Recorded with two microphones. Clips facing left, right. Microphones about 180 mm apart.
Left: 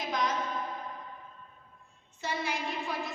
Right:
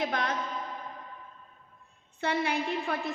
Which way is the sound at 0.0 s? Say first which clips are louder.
Right 1 dB; 60° right (ahead or behind).